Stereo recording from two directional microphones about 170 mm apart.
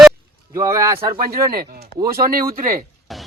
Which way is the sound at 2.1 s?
60° right (ahead or behind).